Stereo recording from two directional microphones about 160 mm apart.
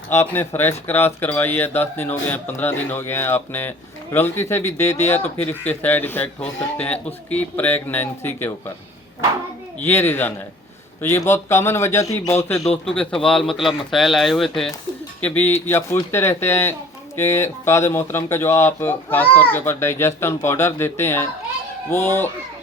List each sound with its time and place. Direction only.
0.1 s speech: 15° left (ahead or behind)
9.8 s speech: 15° left (ahead or behind)
12.8 s speech: 5° left (ahead or behind)
15.2 s speech: 10° left (ahead or behind)